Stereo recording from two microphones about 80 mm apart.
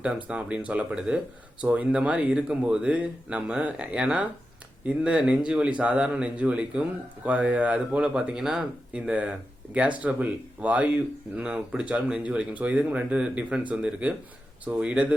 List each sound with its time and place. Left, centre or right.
0.0 s speech: centre